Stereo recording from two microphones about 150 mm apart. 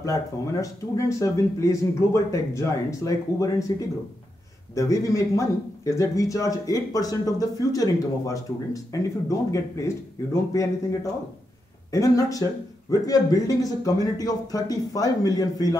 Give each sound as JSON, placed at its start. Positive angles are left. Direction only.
{"t": 0.0, "sound": "speech", "side_deg": 20}
{"t": 4.7, "sound": "speech", "side_deg": 20}